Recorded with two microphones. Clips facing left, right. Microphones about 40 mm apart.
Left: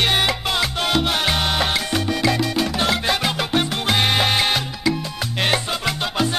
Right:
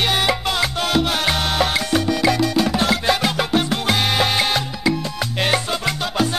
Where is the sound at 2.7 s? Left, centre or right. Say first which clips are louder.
Right 2 dB; centre.